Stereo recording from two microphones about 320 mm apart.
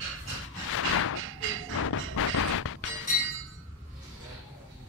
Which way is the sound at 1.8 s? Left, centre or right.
Left.